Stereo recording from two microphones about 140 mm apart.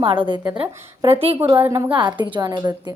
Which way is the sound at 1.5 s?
20° right (ahead or behind).